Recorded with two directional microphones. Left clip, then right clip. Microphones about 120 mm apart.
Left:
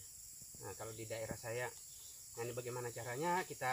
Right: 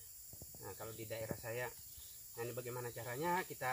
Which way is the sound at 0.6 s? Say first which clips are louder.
Left 1 dB; 10° left (ahead or behind).